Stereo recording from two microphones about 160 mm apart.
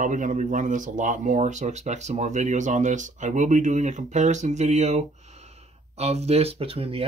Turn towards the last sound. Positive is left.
turn(degrees=-35)  # may be behind; listen again after turning